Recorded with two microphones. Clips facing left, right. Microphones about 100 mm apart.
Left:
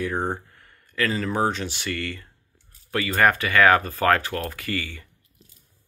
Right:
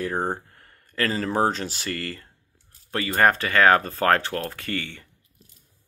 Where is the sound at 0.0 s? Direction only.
35° right (ahead or behind).